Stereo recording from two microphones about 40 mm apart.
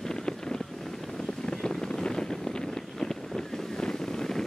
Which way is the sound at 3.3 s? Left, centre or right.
Centre.